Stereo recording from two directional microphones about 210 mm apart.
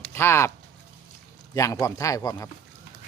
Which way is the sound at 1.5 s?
15° left (ahead or behind).